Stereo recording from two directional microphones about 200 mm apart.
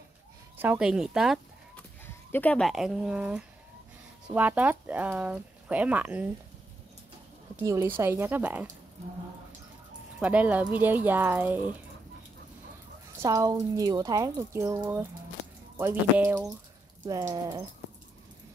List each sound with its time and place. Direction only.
0.6 s speech: 5° right (ahead or behind)
2.0 s speech: 10° left (ahead or behind); by 6.2 s 10° right (ahead or behind)
7.5 s speech: 15° right (ahead or behind)
10.1 s speech: 5° right (ahead or behind)
13.2 s speech: 15° right (ahead or behind)
17.3 s speech: 20° right (ahead or behind)